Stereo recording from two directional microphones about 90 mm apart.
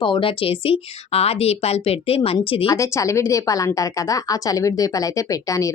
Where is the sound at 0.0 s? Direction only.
70° left (ahead or behind); by 2.7 s 90° left.